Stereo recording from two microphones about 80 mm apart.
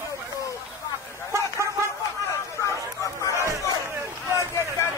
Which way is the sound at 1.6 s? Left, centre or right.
Right.